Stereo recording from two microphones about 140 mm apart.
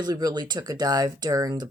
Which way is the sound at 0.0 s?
25° right (ahead or behind).